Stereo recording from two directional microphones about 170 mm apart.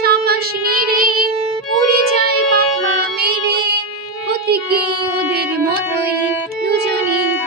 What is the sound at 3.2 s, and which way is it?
Music, 70° right (ahead or behind).